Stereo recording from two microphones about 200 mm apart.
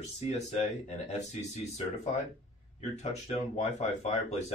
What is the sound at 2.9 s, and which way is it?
Speech, 35° left (ahead or behind).